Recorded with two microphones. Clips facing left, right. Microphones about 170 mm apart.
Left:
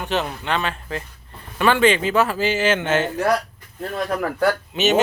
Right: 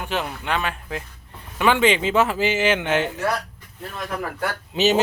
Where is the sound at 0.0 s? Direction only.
10° right (ahead or behind).